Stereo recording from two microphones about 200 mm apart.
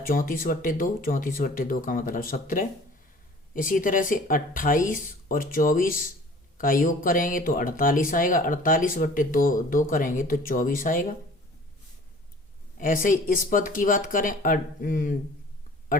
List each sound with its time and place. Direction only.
0.0 s speech: 45° left (ahead or behind)
12.7 s speech: 45° left (ahead or behind)